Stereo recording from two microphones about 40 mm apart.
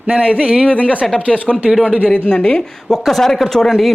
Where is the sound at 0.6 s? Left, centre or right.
Left.